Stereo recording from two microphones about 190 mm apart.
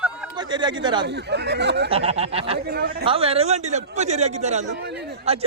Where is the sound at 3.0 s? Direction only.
30° right (ahead or behind).